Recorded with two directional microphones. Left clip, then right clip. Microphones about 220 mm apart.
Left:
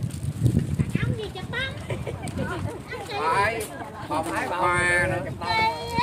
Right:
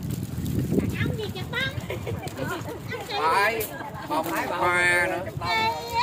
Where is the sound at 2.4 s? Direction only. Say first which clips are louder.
Right 1 dB; 15° right (ahead or behind).